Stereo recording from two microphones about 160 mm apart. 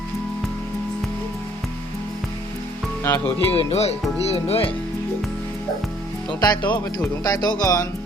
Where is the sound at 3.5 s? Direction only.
40° left (ahead or behind).